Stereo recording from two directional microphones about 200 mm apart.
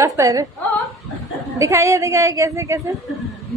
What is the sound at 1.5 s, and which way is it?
A woman's voice, 15° right (ahead or behind).